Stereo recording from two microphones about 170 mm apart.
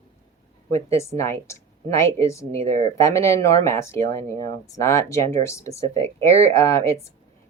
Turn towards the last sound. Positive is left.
turn(degrees=15)  # may be behind; listen again after turning